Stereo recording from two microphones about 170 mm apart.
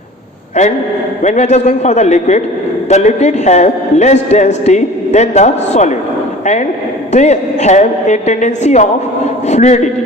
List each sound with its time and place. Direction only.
1.2 s a man's voice: 40° left (ahead or behind)